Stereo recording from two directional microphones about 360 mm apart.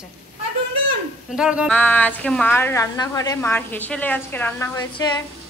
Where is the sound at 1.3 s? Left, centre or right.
Centre.